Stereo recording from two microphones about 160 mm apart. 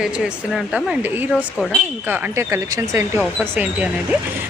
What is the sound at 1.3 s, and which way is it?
Speech, 5° left (ahead or behind).